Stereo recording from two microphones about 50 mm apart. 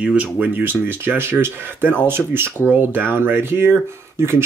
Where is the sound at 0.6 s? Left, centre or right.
Right.